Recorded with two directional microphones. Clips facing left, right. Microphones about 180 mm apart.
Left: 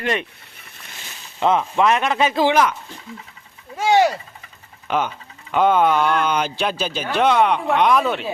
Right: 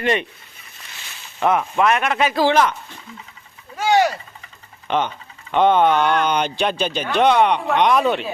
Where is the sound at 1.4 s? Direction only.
20° left (ahead or behind).